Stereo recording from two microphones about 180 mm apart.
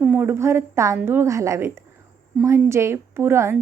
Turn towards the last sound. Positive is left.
turn(degrees=-15)  # may be behind; listen again after turning